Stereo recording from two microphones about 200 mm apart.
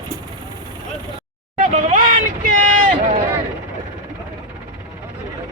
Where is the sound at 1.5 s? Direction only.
40° right (ahead or behind).